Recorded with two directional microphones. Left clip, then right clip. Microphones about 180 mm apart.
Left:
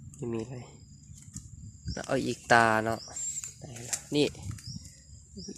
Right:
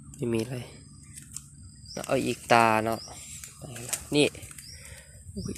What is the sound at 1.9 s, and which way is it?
Speech, 20° left (ahead or behind).